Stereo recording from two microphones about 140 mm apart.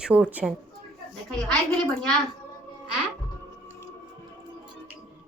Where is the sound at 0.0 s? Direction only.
10° right (ahead or behind).